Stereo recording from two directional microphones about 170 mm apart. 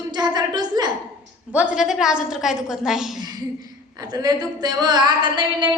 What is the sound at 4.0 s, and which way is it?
A woman's voice, 20° right (ahead or behind).